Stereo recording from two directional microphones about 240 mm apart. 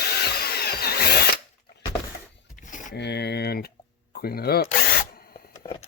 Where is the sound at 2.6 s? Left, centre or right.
Left.